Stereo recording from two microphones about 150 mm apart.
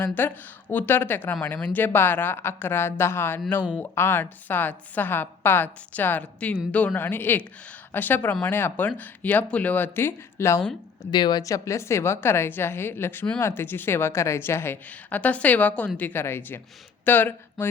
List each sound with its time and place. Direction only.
0.0 s a woman's voice: 15° left (ahead or behind)
11.0 s a woman's voice: 30° left (ahead or behind); by 17.7 s 10° left (ahead or behind)